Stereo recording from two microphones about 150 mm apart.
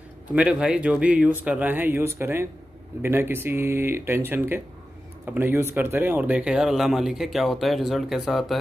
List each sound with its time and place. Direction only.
0.3 s speech: 5° right (ahead or behind)